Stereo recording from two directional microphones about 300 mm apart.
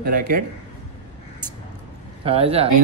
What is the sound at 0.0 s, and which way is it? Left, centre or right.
Speech, right.